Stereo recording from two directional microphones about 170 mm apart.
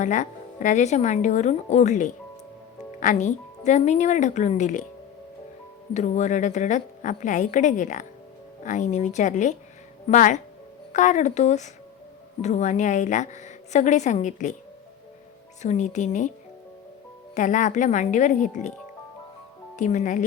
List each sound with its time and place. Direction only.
0.0 s speech: 45° left (ahead or behind)
5.9 s speech: 45° left (ahead or behind)
15.6 s speech: 45° left (ahead or behind)
17.3 s speech: 50° left (ahead or behind)
19.7 s speech: 45° left (ahead or behind)